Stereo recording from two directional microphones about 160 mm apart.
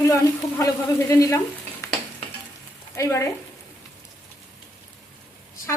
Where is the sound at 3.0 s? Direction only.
20° left (ahead or behind).